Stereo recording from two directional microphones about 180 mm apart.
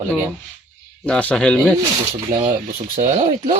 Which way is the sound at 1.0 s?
5° left (ahead or behind).